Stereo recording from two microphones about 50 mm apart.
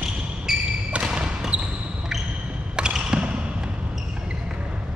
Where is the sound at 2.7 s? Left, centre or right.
Centre.